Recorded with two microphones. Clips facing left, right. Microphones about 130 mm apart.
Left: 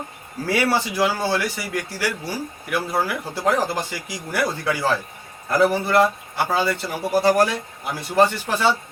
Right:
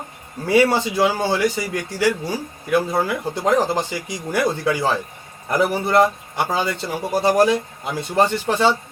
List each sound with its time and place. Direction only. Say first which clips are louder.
0.4 s speech: right 5 dB; 20° right (ahead or behind)